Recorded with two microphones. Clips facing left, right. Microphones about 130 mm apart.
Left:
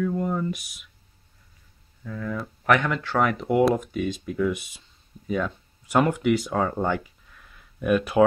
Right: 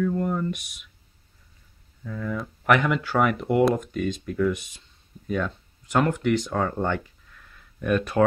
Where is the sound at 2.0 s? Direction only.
Centre (ahead or behind).